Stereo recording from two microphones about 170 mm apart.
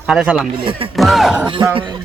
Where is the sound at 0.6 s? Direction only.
30° right (ahead or behind).